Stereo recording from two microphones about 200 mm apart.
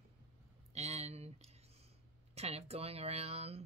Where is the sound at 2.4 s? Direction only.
30° right (ahead or behind).